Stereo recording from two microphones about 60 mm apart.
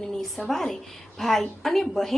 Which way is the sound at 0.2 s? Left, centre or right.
Centre.